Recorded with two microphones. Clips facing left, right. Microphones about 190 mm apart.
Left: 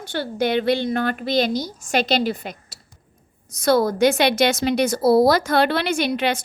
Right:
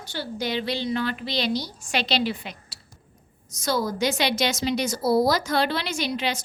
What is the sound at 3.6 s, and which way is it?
A woman's voice, 60° left (ahead or behind).